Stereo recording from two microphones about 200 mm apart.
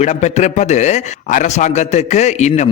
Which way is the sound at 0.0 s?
35° left (ahead or behind).